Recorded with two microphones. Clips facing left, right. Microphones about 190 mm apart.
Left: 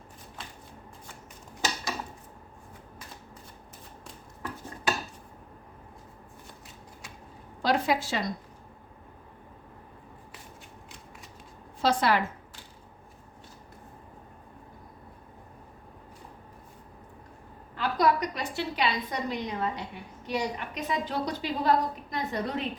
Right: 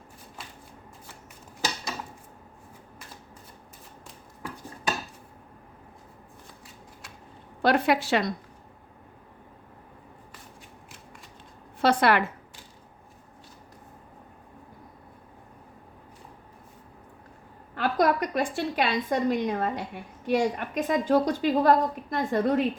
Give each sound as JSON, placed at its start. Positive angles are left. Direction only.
{"t": 7.6, "sound": "a woman's voice", "side_deg": -60}
{"t": 11.8, "sound": "a woman's voice", "side_deg": -60}
{"t": 17.7, "sound": "a woman's voice", "side_deg": -50}